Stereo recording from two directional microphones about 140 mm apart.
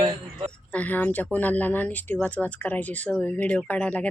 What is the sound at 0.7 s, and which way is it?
Speech, 10° left (ahead or behind).